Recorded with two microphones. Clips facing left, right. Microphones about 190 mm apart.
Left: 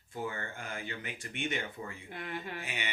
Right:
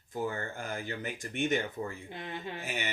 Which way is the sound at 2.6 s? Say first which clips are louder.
Right 4 dB; 40° right (ahead or behind).